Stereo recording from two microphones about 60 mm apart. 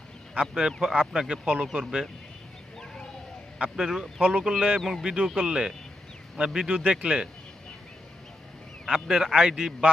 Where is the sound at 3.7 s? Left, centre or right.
Centre.